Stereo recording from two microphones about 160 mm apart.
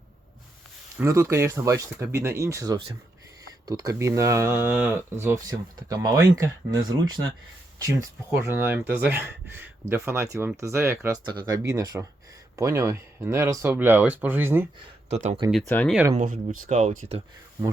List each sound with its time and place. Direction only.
0.9 s speech: 15° right (ahead or behind)
15.1 s speech: 45° right (ahead or behind)
15.6 s speech: 10° left (ahead or behind)
16.1 s speech: 55° right (ahead or behind)